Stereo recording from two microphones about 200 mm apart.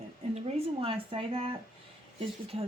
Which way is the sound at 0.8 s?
30° right (ahead or behind).